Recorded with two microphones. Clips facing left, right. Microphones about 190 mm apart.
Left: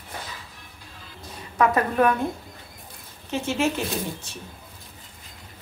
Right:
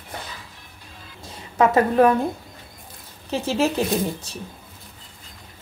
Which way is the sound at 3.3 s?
35° right (ahead or behind).